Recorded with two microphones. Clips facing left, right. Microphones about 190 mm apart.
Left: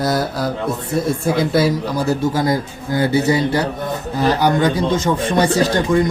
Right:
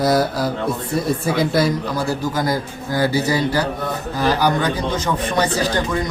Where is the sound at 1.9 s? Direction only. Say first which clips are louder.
Left 3 dB; 25° left (ahead or behind).